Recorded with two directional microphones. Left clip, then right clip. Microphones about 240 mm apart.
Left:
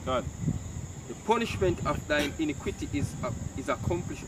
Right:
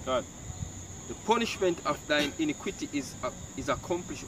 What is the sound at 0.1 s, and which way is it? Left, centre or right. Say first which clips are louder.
Speech: right 1 dB; centre.